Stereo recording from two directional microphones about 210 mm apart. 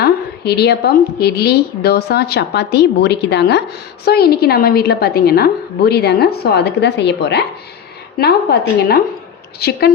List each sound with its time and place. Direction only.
0.0 s a woman's voice: 50° left (ahead or behind)